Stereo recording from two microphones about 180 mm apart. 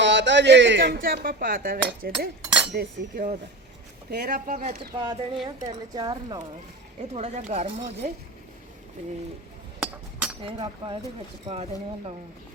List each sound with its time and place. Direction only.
0.0 s speech: 80° right
0.9 s speech: 50° right (ahead or behind)
4.9 s speech: 25° right (ahead or behind)
7.1 s speech: 40° right (ahead or behind)
9.8 s chink: 10° right (ahead or behind)
10.4 s speech: 25° right (ahead or behind)